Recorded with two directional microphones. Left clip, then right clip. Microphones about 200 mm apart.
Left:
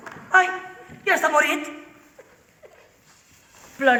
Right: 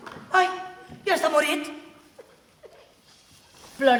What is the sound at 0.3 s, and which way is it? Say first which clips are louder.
A man's voice: left 4 dB; 15° right (ahead or behind).